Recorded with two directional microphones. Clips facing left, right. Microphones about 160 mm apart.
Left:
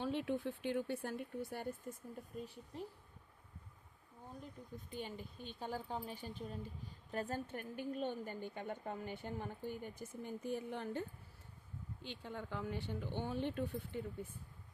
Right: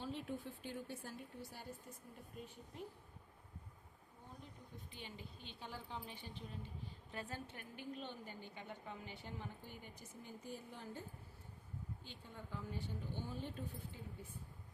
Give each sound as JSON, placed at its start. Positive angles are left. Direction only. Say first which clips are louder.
{"t": 0.0, "sound": "speech", "louder": "left 7 dB", "side_deg": 70}
{"t": 2.3, "sound": "speech", "louder": "left 3 dB", "side_deg": 40}
{"t": 4.9, "sound": "a woman's voice", "louder": "left 9 dB", "side_deg": 45}
{"t": 12.0, "sound": "speech", "louder": "left 8 dB", "side_deg": 80}